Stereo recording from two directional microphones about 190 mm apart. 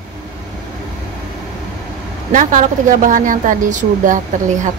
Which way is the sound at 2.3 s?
45° right (ahead or behind).